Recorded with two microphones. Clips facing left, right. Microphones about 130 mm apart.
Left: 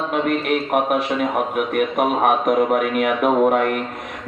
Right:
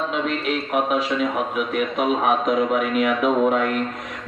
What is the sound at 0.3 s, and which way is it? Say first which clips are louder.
A man's voice: left 4 dB; 55° left (ahead or behind).